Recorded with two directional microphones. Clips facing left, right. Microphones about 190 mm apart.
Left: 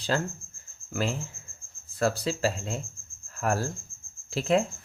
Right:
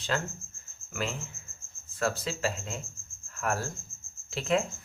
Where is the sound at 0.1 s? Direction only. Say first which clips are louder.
Left 3 dB; 35° left (ahead or behind).